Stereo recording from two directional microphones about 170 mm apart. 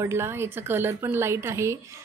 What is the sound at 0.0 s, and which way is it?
A woman's voice, 15° right (ahead or behind).